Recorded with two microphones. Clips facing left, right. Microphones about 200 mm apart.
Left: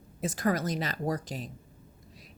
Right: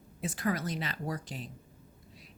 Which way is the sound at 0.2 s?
45° left (ahead or behind).